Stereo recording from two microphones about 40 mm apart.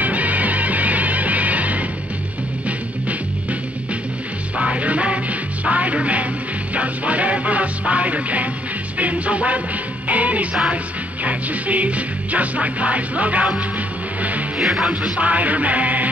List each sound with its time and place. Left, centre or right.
0.0 s music: right
4.6 s music: right
14.6 s music: centre
15.1 s music: right